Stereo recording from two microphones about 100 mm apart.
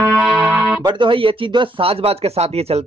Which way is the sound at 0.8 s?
60° right (ahead or behind).